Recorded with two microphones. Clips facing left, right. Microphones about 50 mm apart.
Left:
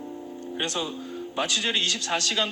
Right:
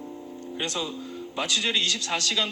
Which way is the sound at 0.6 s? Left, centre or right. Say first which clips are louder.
Left 1 dB; left.